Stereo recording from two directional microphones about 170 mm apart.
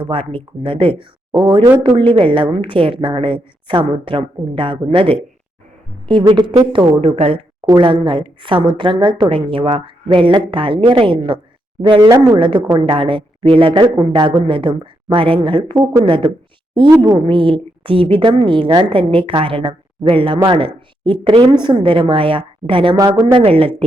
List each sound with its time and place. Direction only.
0.1 s a woman's voice: 30° right (ahead or behind)